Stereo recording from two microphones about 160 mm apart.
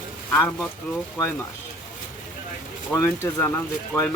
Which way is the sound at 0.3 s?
10° left (ahead or behind).